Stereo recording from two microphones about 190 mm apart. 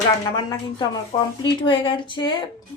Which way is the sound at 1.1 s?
25° left (ahead or behind).